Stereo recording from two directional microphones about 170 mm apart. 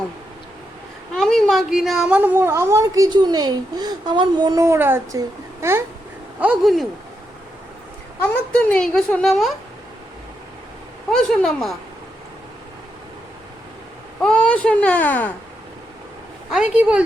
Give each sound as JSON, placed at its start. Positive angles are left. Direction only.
{"t": 1.1, "sound": "a woman's voice", "side_deg": 5}
{"t": 6.4, "sound": "speech", "side_deg": -5}
{"t": 8.2, "sound": "speech", "side_deg": 5}
{"t": 11.1, "sound": "speech", "side_deg": 0}
{"t": 14.2, "sound": "speech", "side_deg": 5}
{"t": 16.5, "sound": "speech", "side_deg": -5}